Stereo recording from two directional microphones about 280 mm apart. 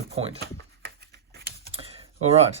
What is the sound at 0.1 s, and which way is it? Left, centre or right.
Speech, right.